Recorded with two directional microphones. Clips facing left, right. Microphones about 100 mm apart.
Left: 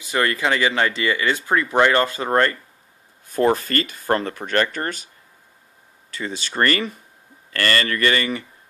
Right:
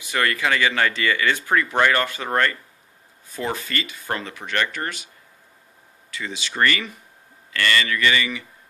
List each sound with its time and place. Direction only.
0.0 s speech: 25° left (ahead or behind)
3.3 s speech: 45° left (ahead or behind)